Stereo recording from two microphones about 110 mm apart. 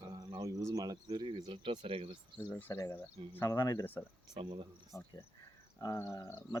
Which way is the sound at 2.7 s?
30° left (ahead or behind).